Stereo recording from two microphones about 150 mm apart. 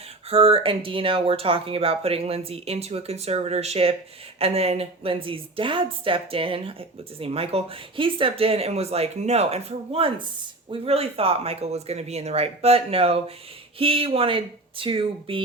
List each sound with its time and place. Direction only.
0.3 s a woman's voice: 40° right (ahead or behind)